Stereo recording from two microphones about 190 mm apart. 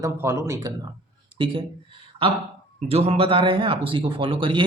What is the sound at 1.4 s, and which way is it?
Speech, 25° right (ahead or behind).